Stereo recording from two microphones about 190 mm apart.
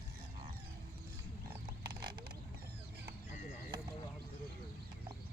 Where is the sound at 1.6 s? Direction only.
25° right (ahead or behind).